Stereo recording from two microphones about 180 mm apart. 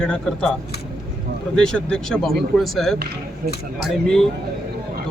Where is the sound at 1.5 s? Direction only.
5° left (ahead or behind).